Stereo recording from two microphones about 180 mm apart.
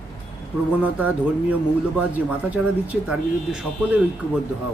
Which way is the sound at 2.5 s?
5° right (ahead or behind).